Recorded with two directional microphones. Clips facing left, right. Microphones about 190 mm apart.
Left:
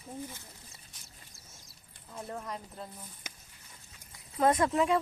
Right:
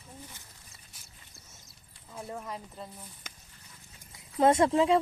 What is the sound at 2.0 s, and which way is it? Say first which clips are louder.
Speech: even; 5° right (ahead or behind).